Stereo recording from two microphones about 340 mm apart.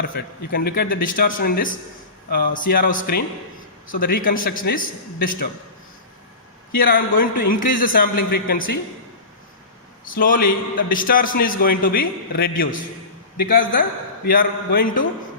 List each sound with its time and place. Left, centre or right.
0.1 s a man's voice: left
6.7 s a man's voice: left
10.1 s a man's voice: left